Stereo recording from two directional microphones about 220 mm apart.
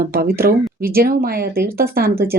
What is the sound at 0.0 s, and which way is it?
Speech, 45° right (ahead or behind).